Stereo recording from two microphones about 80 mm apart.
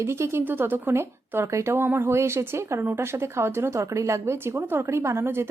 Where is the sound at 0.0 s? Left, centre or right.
Right.